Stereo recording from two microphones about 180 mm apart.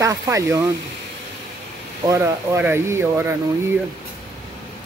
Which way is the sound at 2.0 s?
15° right (ahead or behind).